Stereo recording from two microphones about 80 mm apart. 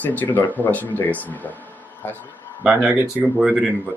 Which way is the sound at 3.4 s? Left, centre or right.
Centre.